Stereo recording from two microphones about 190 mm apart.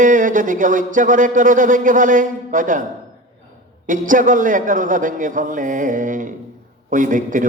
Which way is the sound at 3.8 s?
45° right (ahead or behind).